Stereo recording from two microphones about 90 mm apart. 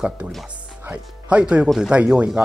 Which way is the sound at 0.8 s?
10° right (ahead or behind).